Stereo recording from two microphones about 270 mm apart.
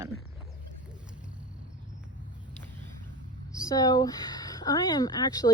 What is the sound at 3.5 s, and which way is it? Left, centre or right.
A woman's voice, centre.